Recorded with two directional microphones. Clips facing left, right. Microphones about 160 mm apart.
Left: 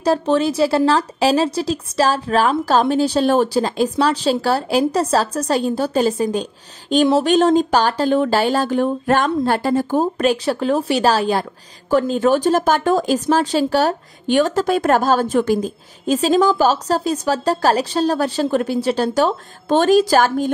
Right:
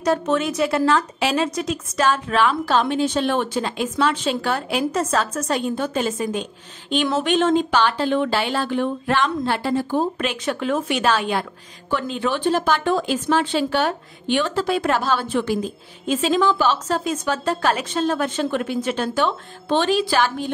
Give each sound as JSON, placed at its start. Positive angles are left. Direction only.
{"t": 0.0, "sound": "speech", "side_deg": 30}